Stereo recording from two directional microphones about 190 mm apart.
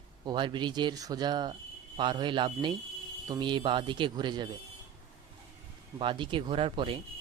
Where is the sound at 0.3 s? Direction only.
25° right (ahead or behind).